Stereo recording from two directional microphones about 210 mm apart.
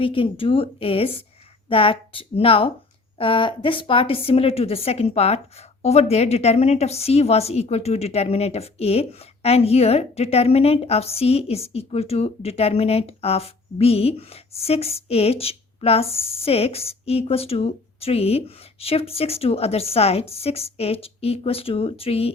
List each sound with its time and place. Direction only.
0.0 s a woman's voice: 25° left (ahead or behind)